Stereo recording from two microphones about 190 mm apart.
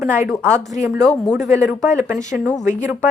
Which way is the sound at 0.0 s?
10° right (ahead or behind).